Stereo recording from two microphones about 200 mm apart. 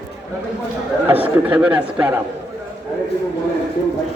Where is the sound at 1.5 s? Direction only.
5° right (ahead or behind).